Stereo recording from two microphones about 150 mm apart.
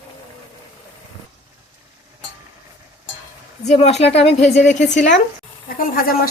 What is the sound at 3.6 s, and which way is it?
Speech, 45° left (ahead or behind).